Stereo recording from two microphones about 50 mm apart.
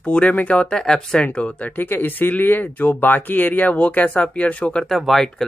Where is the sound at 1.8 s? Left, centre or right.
Left.